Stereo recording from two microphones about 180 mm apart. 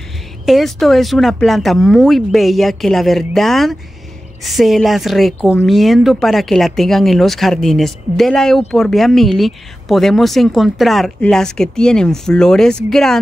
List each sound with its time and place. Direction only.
0.5 s speech: centre (ahead or behind)